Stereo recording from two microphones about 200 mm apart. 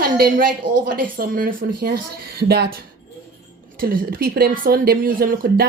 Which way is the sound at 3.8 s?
45° right (ahead or behind).